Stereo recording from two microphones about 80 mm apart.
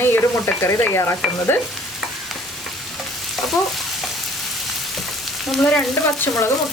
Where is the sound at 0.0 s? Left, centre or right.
Left.